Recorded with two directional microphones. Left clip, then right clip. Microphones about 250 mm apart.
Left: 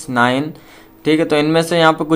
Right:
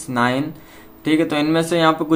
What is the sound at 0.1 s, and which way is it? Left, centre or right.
A man's voice, left.